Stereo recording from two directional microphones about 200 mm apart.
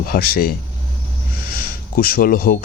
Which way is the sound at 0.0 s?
50° left (ahead or behind).